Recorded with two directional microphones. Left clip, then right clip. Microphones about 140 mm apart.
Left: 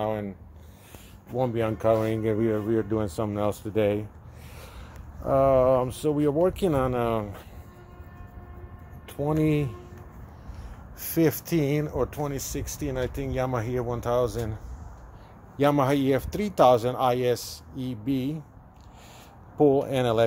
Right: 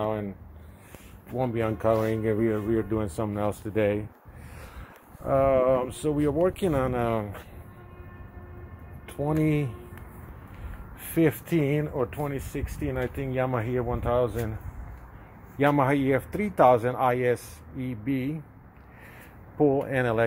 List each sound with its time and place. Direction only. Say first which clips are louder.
0.0 s a sound: even; 10° left (ahead or behind)
1.3 s speech: left 1 dB; 20° left (ahead or behind)
1.8 s speech: left 1 dB; 10° left (ahead or behind)
2.0 s speech: even; 25° left (ahead or behind)
5.3 s speech: left 2 dB; 25° left (ahead or behind)
9.2 s speech: left 1 dB; 10° left (ahead or behind)
11.0 s speech: even; centre (ahead or behind)
15.5 s speech: even; 5° left (ahead or behind)
16.6 s speech: even; 15° left (ahead or behind)
19.5 s speech: left 2 dB; 25° left (ahead or behind)